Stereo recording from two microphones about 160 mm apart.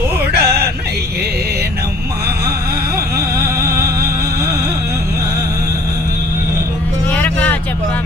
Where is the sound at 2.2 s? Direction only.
80° right.